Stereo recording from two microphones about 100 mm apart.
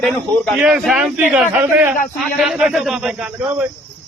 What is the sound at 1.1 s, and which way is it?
Speech, 15° right (ahead or behind).